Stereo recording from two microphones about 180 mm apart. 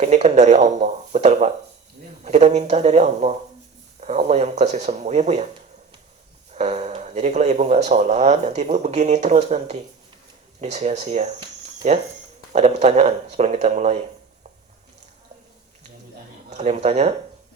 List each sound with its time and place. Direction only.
0.0 s speech: 40° right (ahead or behind)
6.5 s speech: 40° right (ahead or behind)
12.5 s speech: 40° right (ahead or behind)
16.5 s speech: 40° right (ahead or behind)